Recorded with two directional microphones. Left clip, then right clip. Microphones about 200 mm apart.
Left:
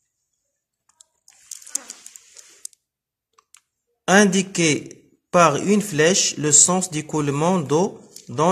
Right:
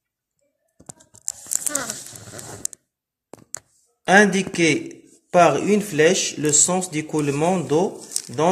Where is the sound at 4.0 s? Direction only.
35° left (ahead or behind).